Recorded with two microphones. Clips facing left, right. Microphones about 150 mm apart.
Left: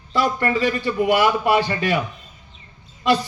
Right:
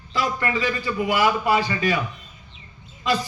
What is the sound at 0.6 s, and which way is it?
A man's voice, 60° left (ahead or behind).